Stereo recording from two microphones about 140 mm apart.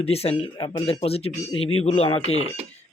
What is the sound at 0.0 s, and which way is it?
Speech, 45° left (ahead or behind).